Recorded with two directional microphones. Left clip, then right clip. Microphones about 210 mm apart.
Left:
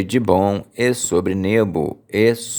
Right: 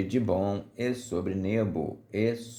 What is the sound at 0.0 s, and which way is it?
Speech, 40° left (ahead or behind).